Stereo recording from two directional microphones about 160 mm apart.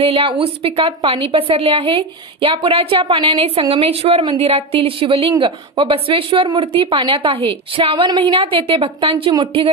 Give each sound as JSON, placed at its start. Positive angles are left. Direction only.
{"t": 0.0, "sound": "a woman's voice", "side_deg": -35}